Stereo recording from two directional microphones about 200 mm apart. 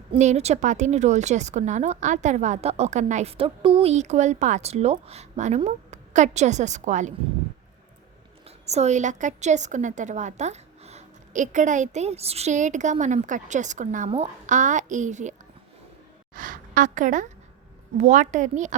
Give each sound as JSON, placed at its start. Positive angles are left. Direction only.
{"t": 0.1, "sound": "a woman's voice", "side_deg": -35}
{"t": 8.4, "sound": "a woman's voice", "side_deg": -35}